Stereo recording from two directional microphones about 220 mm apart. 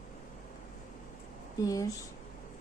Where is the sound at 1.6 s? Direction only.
15° left (ahead or behind).